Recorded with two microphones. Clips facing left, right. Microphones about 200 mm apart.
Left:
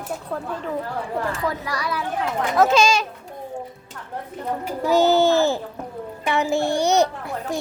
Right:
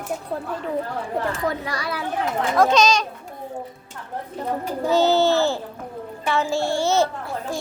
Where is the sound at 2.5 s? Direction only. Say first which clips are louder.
Even; 5° left (ahead or behind).